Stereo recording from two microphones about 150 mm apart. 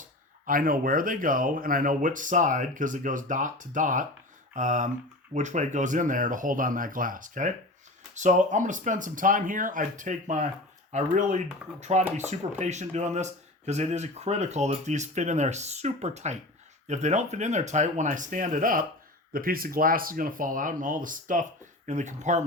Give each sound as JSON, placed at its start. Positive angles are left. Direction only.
{"t": 0.4, "sound": "speech", "side_deg": -70}